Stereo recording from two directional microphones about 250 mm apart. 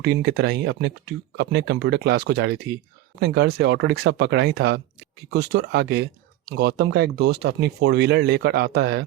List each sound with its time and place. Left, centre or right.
0.0 s speech: right